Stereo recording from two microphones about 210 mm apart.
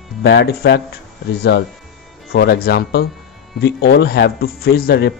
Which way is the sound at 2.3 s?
50° left (ahead or behind).